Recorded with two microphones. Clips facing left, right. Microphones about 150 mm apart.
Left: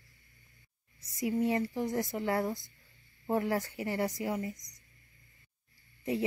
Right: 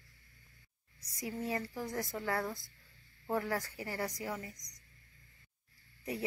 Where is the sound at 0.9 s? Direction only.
20° left (ahead or behind).